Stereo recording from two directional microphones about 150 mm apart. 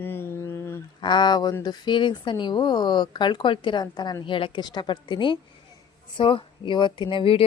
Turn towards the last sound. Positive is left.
turn(degrees=35)  # may be behind; listen again after turning